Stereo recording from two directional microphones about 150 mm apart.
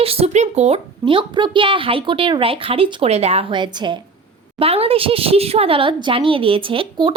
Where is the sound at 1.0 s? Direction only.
35° right (ahead or behind).